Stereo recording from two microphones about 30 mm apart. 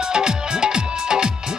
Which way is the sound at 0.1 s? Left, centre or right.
Right.